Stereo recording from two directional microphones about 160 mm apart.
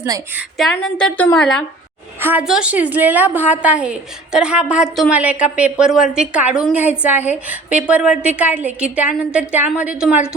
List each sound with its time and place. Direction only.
0.6 s speech: 5° left (ahead or behind)
2.2 s a woman's voice: 5° right (ahead or behind)